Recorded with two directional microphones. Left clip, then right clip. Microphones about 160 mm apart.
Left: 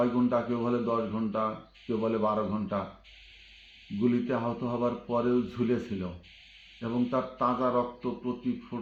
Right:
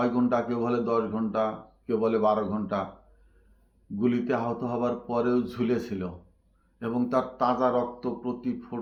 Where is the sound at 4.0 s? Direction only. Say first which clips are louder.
Right 2 dB; centre (ahead or behind).